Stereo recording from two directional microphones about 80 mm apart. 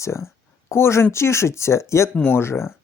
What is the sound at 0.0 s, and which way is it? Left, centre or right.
Speech, left.